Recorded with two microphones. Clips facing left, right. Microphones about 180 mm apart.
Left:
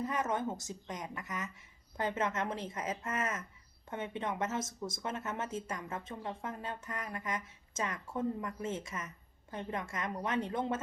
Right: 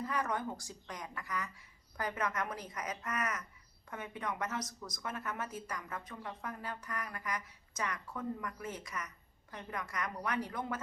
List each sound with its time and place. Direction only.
0.0 s speech: 20° left (ahead or behind)